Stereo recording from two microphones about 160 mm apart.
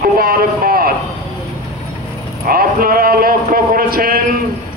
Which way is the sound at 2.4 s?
65° right (ahead or behind).